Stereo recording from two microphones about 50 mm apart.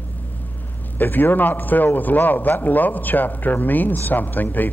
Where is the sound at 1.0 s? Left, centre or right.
Left.